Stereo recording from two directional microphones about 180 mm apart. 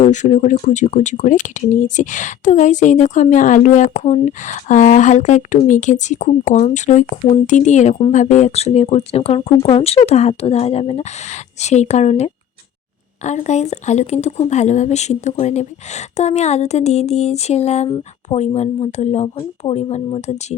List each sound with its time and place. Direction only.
0.0 s speech: 40° left (ahead or behind)
17.8 s speech: 25° left (ahead or behind)
18.3 s speech: 35° left (ahead or behind)